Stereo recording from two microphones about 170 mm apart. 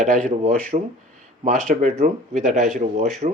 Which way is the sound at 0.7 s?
35° right (ahead or behind).